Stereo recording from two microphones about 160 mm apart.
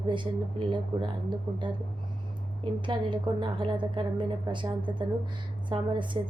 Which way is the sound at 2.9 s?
30° right (ahead or behind).